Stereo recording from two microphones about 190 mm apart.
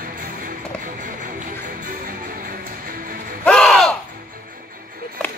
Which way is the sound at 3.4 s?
5° left (ahead or behind).